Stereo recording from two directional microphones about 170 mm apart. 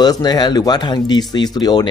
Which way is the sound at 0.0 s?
25° left (ahead or behind).